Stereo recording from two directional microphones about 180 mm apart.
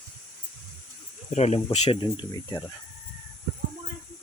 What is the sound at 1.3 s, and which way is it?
Speech, 35° left (ahead or behind).